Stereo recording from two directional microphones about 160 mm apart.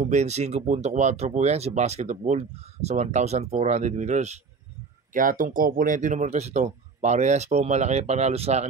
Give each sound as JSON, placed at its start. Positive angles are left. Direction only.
{"t": 0.0, "sound": "speech", "side_deg": -45}
{"t": 5.1, "sound": "speech", "side_deg": -60}